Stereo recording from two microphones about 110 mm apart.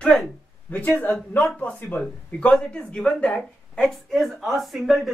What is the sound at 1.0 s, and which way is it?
A woman's voice, 15° left (ahead or behind).